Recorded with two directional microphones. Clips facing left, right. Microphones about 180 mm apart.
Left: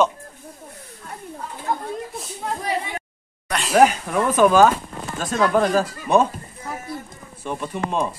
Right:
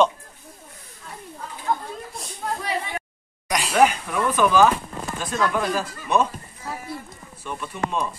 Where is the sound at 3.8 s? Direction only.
40° left (ahead or behind).